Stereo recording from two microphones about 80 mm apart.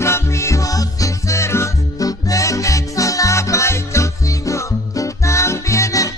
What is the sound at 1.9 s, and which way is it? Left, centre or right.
Music, left.